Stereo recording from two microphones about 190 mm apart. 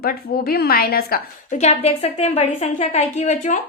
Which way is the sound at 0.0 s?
55° left (ahead or behind).